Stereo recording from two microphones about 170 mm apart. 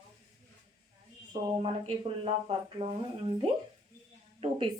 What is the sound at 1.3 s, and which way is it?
Speech, 30° right (ahead or behind).